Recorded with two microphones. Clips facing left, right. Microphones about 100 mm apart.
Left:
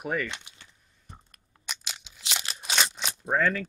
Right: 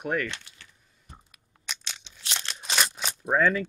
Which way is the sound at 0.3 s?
20° left (ahead or behind).